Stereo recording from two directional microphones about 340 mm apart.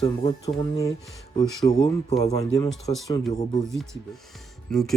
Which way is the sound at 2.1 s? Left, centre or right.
Centre.